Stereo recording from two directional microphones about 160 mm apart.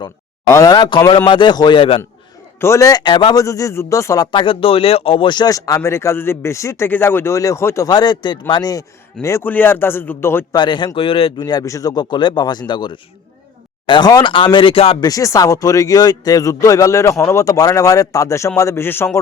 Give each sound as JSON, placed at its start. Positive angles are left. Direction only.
{"t": 0.4, "sound": "speech", "side_deg": 20}
{"t": 2.6, "sound": "speech", "side_deg": 20}
{"t": 9.2, "sound": "a man's voice", "side_deg": 15}
{"t": 10.6, "sound": "speech", "side_deg": 30}
{"t": 15.0, "sound": "speech", "side_deg": 20}